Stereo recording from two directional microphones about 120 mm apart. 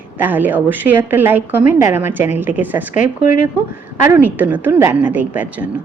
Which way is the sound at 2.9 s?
90° left.